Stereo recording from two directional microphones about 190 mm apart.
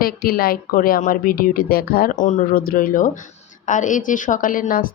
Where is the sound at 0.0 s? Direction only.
50° left (ahead or behind).